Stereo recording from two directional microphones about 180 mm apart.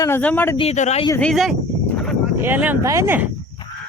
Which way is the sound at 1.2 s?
Centre (ahead or behind).